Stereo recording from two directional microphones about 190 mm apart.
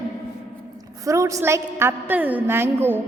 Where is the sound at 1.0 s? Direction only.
15° right (ahead or behind).